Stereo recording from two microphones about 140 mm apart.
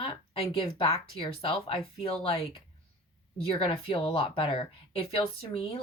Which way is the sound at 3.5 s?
40° left (ahead or behind).